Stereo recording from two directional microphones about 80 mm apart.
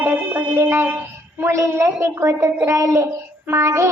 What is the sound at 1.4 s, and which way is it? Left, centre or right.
A child's voice, right.